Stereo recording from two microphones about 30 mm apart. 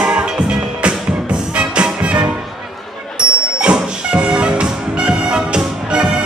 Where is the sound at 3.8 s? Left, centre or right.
Right.